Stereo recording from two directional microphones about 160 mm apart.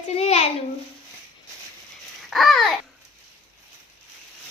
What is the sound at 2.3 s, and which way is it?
Babbling, centre (ahead or behind).